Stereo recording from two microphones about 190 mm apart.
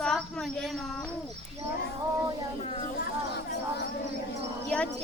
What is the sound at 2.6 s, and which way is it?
Speech, 35° left (ahead or behind).